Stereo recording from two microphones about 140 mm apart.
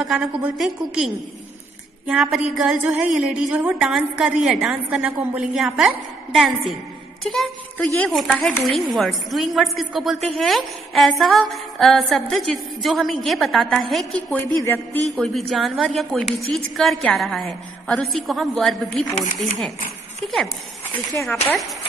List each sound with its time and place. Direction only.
0.0 s a woman's voice: centre (ahead or behind)
14.3 s a woman's voice: 15° left (ahead or behind)
15.0 s a woman's voice: centre (ahead or behind)
21.1 s a woman's voice: 15° left (ahead or behind)